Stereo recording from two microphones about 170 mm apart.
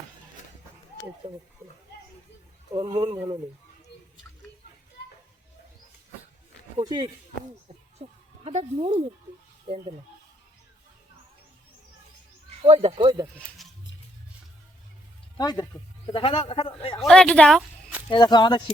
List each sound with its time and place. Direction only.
1.2 s speech: 30° right (ahead or behind)
2.7 s speech: 25° right (ahead or behind)
6.8 s speech: 25° right (ahead or behind)
8.0 s a woman's voice: 40° right (ahead or behind)
12.6 s speech: 35° right (ahead or behind)
13.6 s music: centre (ahead or behind)
15.4 s a man's voice: 25° left (ahead or behind)
17.0 s speech: 5° left (ahead or behind)
18.1 s speech: 25° left (ahead or behind)